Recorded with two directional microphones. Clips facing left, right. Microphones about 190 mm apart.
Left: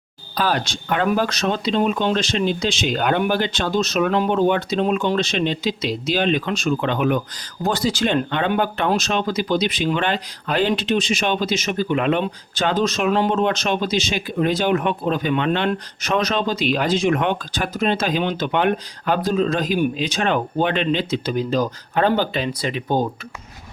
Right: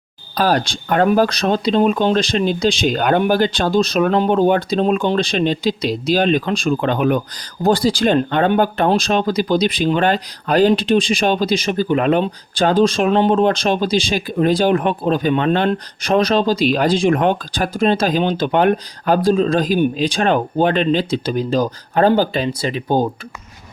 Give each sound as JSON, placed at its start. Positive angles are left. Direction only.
{"t": 0.3, "sound": "speech", "side_deg": -40}